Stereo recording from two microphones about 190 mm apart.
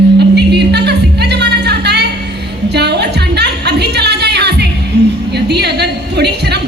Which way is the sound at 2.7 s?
60° right (ahead or behind).